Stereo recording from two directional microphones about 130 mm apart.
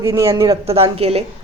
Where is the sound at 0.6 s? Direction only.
50° right (ahead or behind).